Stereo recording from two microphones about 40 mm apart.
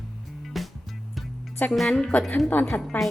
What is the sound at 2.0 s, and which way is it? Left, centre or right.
Speech, left.